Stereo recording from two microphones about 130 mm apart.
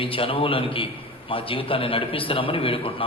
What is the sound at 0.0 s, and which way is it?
A man's voice, 45° left (ahead or behind).